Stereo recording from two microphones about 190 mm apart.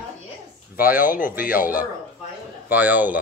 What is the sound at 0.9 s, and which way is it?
Speech, 45° left (ahead or behind).